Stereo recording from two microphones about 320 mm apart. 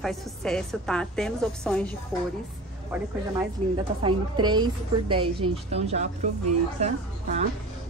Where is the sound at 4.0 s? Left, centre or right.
Centre.